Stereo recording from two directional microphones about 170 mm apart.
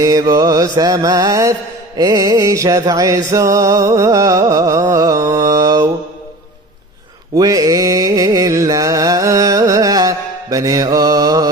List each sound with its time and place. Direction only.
0.0 s mantra: 20° right (ahead or behind)
7.3 s mantra: 20° right (ahead or behind)